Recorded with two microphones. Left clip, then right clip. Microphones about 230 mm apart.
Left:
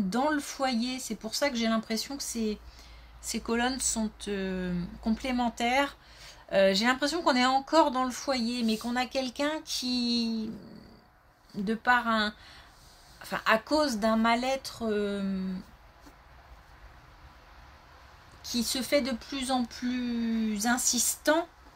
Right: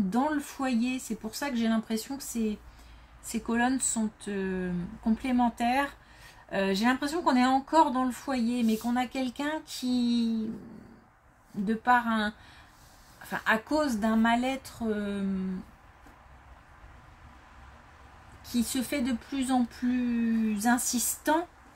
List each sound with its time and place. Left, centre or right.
0.1 s speech: left
11.6 s speech: left
18.5 s speech: left